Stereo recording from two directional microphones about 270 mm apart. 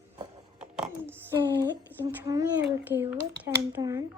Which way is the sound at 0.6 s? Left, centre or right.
Centre.